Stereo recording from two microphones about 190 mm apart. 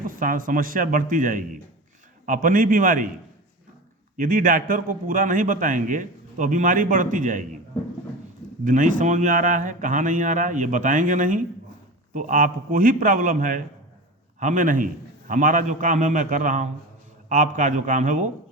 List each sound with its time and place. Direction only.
0.1 s a man's voice: 45° right (ahead or behind)
4.2 s a man's voice: 45° right (ahead or behind)
8.6 s a man's voice: 45° right (ahead or behind)